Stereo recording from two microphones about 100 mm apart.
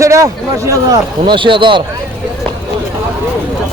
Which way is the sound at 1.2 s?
55° right (ahead or behind).